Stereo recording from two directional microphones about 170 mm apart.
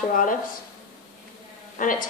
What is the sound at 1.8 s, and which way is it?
Speech, 50° left (ahead or behind).